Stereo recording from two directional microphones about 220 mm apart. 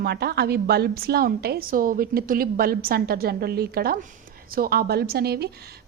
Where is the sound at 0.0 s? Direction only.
45° right (ahead or behind).